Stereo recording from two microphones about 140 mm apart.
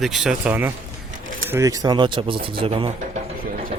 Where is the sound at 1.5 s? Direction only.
25° right (ahead or behind); by 2.8 s 40° right (ahead or behind).